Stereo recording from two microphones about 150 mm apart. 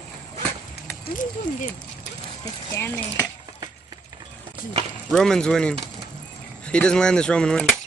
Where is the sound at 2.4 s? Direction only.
15° left (ahead or behind).